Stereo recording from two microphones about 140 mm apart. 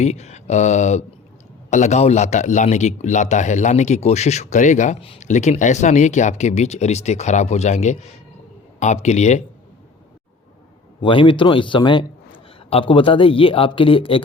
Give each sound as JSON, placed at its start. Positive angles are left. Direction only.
{"t": 0.0, "sound": "a man's voice", "side_deg": 50}
{"t": 4.9, "sound": "speech", "side_deg": 45}
{"t": 5.2, "sound": "a man's voice", "side_deg": 55}
{"t": 11.0, "sound": "a man's voice", "side_deg": 35}